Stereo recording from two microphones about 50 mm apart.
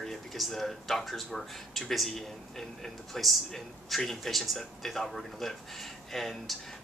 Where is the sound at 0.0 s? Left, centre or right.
Centre.